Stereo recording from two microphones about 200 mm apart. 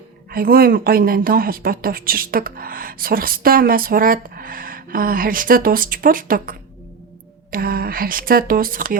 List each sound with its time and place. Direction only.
0.3 s a woman's voice: 50° right (ahead or behind)